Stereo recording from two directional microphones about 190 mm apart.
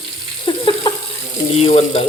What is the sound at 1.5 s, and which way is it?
Speech, 30° left (ahead or behind).